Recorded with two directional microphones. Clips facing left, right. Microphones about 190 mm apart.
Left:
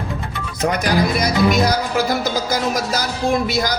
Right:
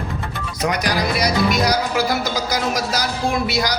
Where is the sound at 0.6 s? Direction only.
50° left (ahead or behind).